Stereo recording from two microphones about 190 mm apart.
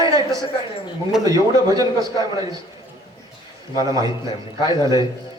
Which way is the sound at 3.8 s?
20° right (ahead or behind).